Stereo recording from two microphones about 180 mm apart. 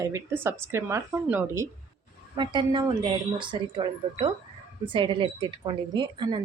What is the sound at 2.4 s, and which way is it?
A woman's voice, 25° right (ahead or behind).